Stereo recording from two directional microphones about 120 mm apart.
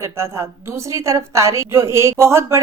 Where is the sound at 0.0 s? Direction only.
20° right (ahead or behind).